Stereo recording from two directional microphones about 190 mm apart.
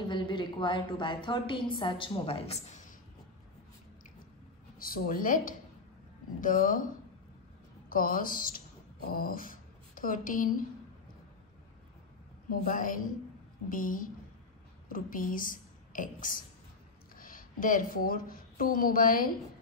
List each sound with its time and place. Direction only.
0.1 s a woman's voice: 25° left (ahead or behind)
4.7 s a woman's voice: 50° left (ahead or behind)
7.9 s speech: 50° left (ahead or behind)
12.4 s a woman's voice: 45° left (ahead or behind)